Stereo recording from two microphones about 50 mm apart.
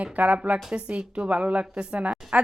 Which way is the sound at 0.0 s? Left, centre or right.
Right.